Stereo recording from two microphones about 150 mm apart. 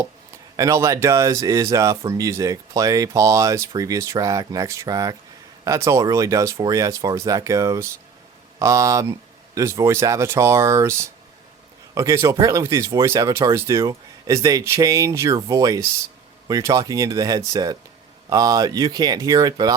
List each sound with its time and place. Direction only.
0.5 s speech: 20° right (ahead or behind)